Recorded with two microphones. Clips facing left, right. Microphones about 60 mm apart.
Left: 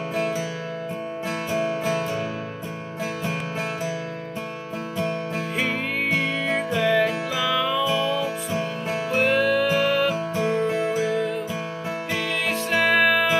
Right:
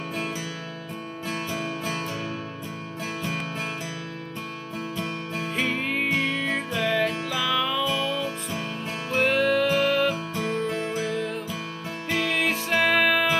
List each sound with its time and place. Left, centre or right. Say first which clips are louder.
4.9 s music: left 7 dB; centre
5.9 s music: left 2 dB; centre
9.1 s music: left 1 dB; centre
10.3 s music: left 5 dB; centre
12.8 s music: left 2 dB; centre